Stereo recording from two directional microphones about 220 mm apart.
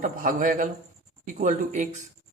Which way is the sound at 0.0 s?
35° right (ahead or behind).